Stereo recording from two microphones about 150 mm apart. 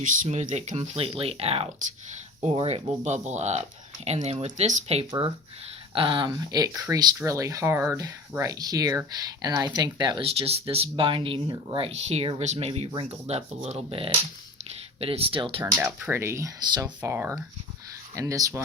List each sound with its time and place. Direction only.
0.0 s speech: 60° right (ahead or behind); by 2.9 s 35° right (ahead or behind)
3.0 s speech: 50° right (ahead or behind)
5.9 s speech: 35° right (ahead or behind)
10.2 s speech: 40° right (ahead or behind)
15.6 s speech: 15° right (ahead or behind)
17.0 s speech: 15° right (ahead or behind)